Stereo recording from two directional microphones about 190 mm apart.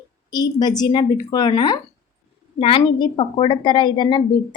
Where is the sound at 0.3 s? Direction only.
20° left (ahead or behind).